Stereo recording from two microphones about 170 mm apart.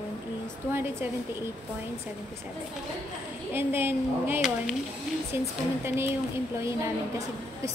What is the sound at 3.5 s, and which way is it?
Speech, 15° right (ahead or behind).